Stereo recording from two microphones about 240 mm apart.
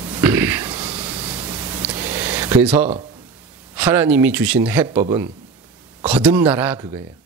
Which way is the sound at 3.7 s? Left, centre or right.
Centre.